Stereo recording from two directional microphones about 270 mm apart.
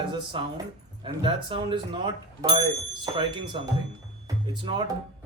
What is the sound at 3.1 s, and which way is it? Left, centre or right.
Speech, centre.